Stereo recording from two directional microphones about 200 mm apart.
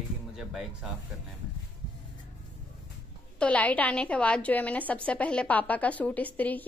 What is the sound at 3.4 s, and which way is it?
A woman's voice, 5° left (ahead or behind).